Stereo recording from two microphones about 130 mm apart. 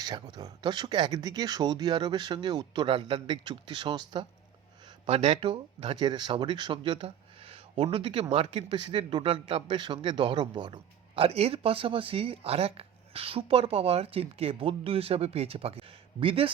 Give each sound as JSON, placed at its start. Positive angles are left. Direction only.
{"t": 0.0, "sound": "speech", "side_deg": -30}
{"t": 5.0, "sound": "speech", "side_deg": -55}